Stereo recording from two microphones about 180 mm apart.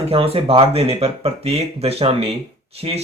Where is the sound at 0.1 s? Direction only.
30° right (ahead or behind).